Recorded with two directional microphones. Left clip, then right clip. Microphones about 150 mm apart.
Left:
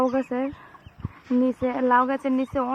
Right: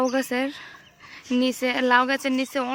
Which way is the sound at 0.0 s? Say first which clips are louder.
Even; 35° right (ahead or behind).